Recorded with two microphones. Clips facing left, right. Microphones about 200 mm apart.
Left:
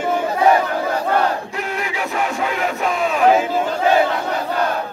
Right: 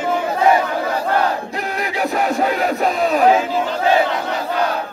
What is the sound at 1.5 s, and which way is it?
Music, 35° right (ahead or behind).